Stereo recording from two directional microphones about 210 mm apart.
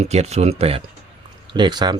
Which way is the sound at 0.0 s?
30° right (ahead or behind).